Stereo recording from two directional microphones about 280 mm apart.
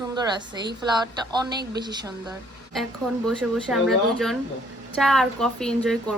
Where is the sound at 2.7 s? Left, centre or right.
Centre.